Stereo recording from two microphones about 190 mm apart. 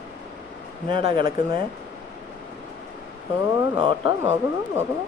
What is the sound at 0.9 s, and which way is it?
Speech, 30° right (ahead or behind).